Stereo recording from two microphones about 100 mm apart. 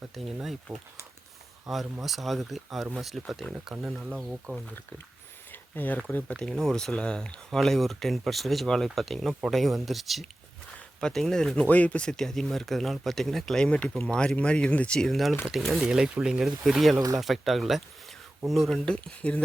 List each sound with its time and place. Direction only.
0.1 s speech: centre (ahead or behind)
5.5 s a sound: 20° left (ahead or behind)
6.1 s speech: 10° left (ahead or behind)